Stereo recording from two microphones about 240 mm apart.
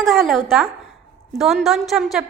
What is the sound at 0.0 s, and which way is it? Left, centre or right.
A woman's voice, centre.